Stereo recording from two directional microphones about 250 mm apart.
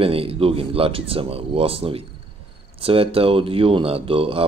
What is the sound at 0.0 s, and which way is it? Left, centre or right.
Speech, right.